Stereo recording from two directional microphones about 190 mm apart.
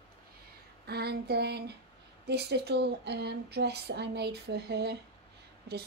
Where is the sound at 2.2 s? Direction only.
60° right (ahead or behind).